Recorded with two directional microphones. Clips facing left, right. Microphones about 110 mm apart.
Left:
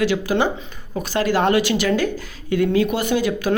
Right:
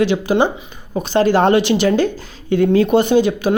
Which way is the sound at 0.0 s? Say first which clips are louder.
Right 4 dB; 20° right (ahead or behind).